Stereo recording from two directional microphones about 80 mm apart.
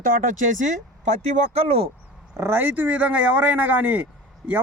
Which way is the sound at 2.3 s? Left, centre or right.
Right.